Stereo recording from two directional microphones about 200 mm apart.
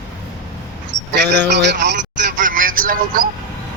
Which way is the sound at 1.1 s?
60° right (ahead or behind).